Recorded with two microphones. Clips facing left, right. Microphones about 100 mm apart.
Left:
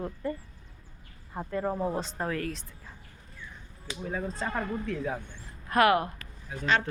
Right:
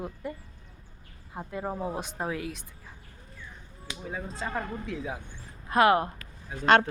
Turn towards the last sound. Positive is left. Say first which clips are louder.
# right 6 dB
turn(degrees=-60)  # may be behind; listen again after turning